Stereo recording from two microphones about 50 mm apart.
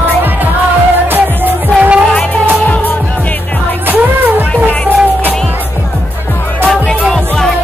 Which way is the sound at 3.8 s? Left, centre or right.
Right.